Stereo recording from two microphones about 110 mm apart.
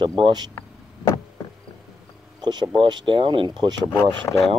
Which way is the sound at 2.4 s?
40° right (ahead or behind).